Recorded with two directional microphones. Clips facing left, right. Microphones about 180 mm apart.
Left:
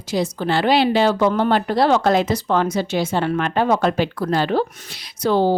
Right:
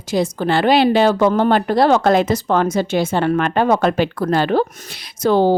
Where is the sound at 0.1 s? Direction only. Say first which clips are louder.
Right 3 dB; 50° right (ahead or behind).